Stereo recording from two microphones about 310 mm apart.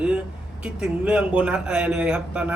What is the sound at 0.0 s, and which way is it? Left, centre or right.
A man's voice, centre.